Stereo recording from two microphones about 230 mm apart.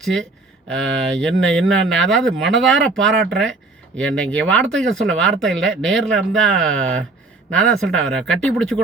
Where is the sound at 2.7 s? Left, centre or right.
Right.